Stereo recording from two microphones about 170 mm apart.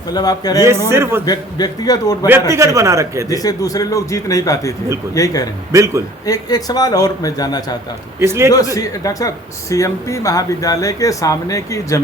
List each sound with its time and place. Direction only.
0.1 s speech: 25° left (ahead or behind)
0.9 s a man's voice: 15° right (ahead or behind)
1.2 s speech: 25° left (ahead or behind)
2.5 s a man's voice: 15° right (ahead or behind)
3.2 s speech: 20° left (ahead or behind)
5.7 s a man's voice: 20° right (ahead or behind)
6.2 s speech: 20° left (ahead or behind)
8.2 s a man's voice: 15° right (ahead or behind)
8.5 s speech: 20° left (ahead or behind)